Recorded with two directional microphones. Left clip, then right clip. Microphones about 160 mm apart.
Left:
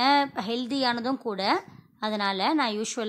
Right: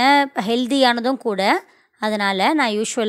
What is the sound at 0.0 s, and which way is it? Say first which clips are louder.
Speech: right 7 dB; 30° right (ahead or behind).